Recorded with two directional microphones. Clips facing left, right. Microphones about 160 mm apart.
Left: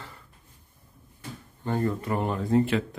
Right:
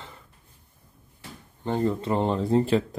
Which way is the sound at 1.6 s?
20° right (ahead or behind).